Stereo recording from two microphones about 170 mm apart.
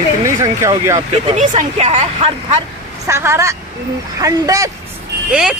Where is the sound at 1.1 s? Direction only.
40° right (ahead or behind).